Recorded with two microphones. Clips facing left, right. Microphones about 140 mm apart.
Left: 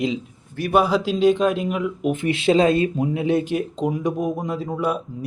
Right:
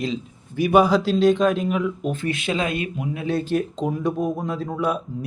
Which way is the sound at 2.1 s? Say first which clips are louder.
Left 6 dB; 25° left (ahead or behind).